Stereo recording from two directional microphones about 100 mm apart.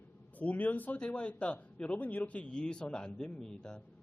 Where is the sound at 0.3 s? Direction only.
15° left (ahead or behind).